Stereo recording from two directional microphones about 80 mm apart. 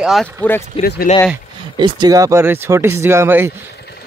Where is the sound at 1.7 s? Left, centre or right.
Right.